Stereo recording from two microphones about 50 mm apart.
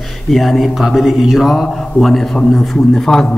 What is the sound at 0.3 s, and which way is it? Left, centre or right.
A man's voice, centre.